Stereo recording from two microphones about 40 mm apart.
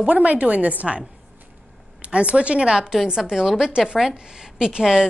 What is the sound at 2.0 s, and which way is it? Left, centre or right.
A woman's voice, right.